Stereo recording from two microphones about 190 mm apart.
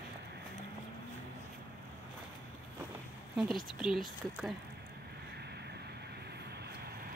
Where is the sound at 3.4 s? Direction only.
Centre (ahead or behind).